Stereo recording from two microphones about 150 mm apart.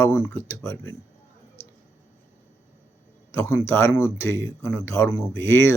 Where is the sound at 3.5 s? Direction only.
15° left (ahead or behind).